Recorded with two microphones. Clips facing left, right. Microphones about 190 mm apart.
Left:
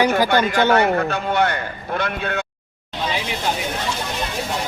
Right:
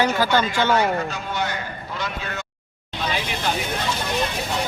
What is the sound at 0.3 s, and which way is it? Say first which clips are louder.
Speech: left 3 dB; 55° left (ahead or behind).